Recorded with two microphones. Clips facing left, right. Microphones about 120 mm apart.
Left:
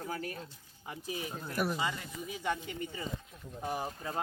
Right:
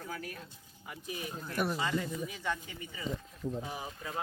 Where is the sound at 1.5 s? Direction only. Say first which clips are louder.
Even; centre (ahead or behind).